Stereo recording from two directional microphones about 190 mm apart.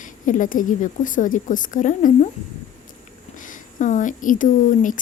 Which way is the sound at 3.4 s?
40° left (ahead or behind).